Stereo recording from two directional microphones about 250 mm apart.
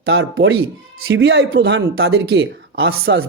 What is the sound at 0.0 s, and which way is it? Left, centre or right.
Speech, right.